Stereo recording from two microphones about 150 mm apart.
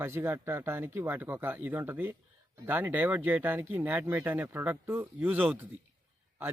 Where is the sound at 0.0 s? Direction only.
15° right (ahead or behind).